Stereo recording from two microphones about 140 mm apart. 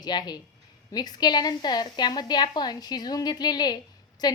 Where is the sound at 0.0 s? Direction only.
30° left (ahead or behind).